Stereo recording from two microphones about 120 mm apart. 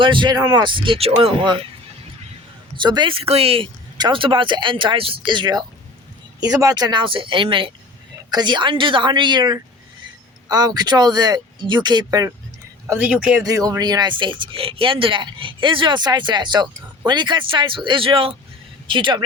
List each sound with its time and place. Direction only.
0.0 s speech: 40° right (ahead or behind)
2.7 s speech: 40° right (ahead or behind)
3.9 s speech: 40° right (ahead or behind)
13.1 s speech: 10° right (ahead or behind)
13.4 s speech: 30° right (ahead or behind)